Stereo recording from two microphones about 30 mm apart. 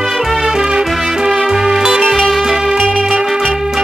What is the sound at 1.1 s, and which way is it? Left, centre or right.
Music, centre.